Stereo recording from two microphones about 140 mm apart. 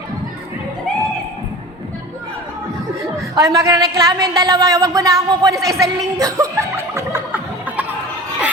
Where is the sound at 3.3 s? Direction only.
25° right (ahead or behind).